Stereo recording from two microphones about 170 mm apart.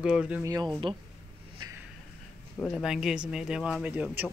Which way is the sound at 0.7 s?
25° right (ahead or behind).